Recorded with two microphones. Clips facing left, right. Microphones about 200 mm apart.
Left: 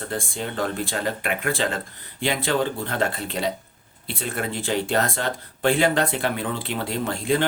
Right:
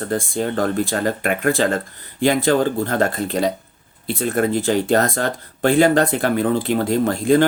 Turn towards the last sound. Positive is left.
turn(degrees=-45)  # may be behind; listen again after turning